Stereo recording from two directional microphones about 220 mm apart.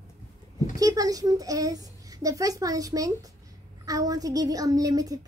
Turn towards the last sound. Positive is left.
turn(degrees=-15)  # may be behind; listen again after turning